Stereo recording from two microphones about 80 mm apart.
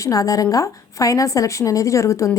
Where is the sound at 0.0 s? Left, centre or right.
Left.